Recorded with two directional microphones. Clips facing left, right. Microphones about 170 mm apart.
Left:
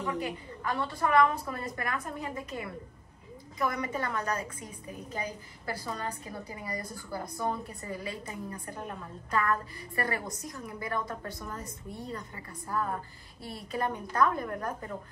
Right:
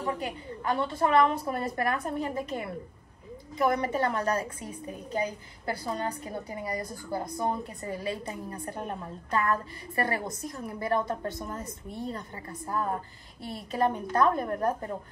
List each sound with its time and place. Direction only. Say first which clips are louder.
0.0 s a woman's voice: right 1 dB; 25° right (ahead or behind)
6.6 s a woman's voice: right 4 dB; 25° right (ahead or behind)